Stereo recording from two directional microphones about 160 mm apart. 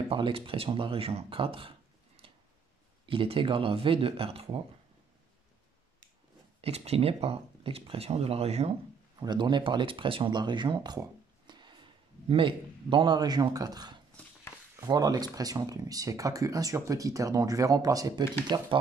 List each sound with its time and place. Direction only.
0.1 s speech: 35° right (ahead or behind)
2.2 s a sound: 40° right (ahead or behind)
3.1 s speech: 35° right (ahead or behind)
6.6 s speech: 40° right (ahead or behind)
9.2 s speech: 25° right (ahead or behind)